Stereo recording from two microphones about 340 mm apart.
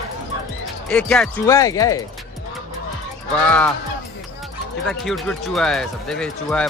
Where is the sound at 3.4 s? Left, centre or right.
Centre.